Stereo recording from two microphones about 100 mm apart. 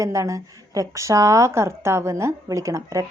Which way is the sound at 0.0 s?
30° right (ahead or behind).